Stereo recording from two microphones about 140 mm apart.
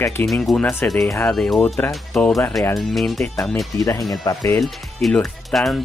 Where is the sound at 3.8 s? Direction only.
25° left (ahead or behind).